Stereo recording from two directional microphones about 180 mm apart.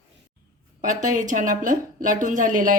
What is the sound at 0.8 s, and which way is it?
A woman's voice, 45° right (ahead or behind).